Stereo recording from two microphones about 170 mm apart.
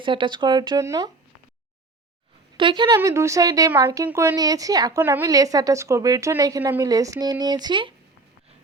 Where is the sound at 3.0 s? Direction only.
15° right (ahead or behind).